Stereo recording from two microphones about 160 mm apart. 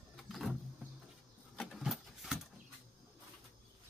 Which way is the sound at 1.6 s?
Centre (ahead or behind).